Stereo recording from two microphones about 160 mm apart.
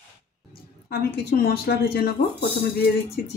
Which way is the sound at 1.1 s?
80° left.